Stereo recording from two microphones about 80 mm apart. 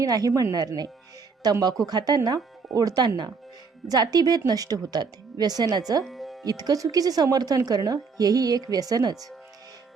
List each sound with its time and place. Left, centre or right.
0.0 s a woman's voice: right
6.1 s music: centre
6.4 s a woman's voice: right